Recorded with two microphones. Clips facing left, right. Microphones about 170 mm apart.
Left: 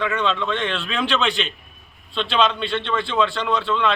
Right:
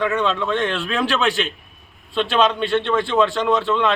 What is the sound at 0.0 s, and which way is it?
A man's voice, 10° right (ahead or behind).